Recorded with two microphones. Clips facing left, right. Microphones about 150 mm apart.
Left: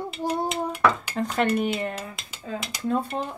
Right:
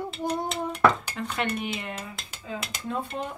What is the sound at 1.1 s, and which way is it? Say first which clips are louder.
Speech: left 6 dB; 40° left (ahead or behind).